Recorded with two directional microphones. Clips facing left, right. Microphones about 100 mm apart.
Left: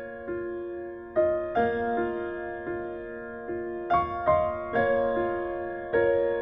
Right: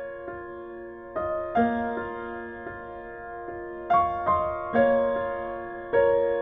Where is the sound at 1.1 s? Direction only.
40° right (ahead or behind).